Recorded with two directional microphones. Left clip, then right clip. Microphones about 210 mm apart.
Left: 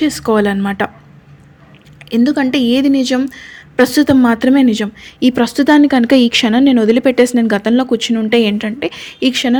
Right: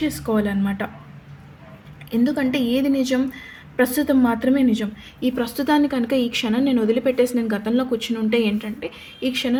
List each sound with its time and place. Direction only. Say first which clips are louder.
0.0 s speech: left 9 dB; 40° left (ahead or behind)
2.0 s a woman's voice: left 7 dB; 40° left (ahead or behind)